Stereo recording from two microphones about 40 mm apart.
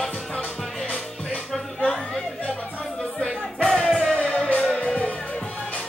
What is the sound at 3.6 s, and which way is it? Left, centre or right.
Music, centre.